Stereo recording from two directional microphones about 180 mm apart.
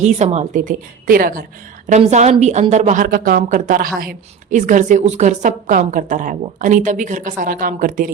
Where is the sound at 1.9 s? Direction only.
40° right (ahead or behind).